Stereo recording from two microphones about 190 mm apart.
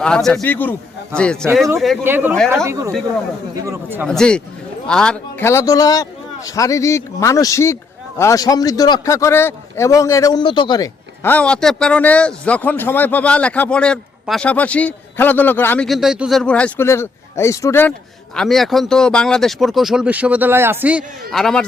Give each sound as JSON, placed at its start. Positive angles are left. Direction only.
{"t": 0.0, "sound": "speech", "side_deg": 5}
{"t": 2.0, "sound": "speech", "side_deg": -10}
{"t": 3.5, "sound": "speech", "side_deg": -15}
{"t": 4.0, "sound": "a man's voice", "side_deg": 5}
{"t": 18.3, "sound": "speech", "side_deg": 0}